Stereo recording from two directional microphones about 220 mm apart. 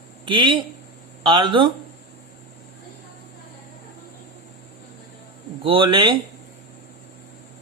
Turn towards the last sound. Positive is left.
turn(degrees=-25)  # may be behind; listen again after turning